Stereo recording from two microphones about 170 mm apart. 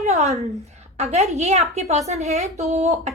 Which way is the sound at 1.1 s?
40° right (ahead or behind).